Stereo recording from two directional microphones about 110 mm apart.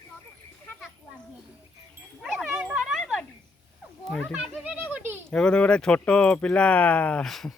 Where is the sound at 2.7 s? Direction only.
5° right (ahead or behind).